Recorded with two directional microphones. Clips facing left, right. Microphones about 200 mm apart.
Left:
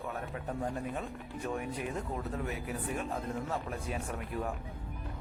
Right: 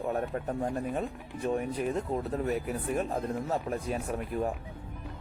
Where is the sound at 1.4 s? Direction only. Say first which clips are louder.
Right 7 dB; 30° right (ahead or behind).